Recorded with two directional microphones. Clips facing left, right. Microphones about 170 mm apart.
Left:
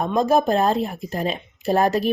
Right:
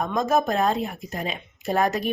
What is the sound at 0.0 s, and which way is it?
Speech, 30° left (ahead or behind).